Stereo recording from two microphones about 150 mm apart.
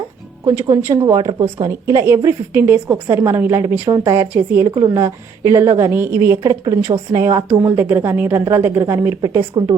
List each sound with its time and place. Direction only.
0.4 s a woman's voice: 15° right (ahead or behind)